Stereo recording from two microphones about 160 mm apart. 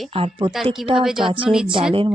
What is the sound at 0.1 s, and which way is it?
Speech, 35° right (ahead or behind).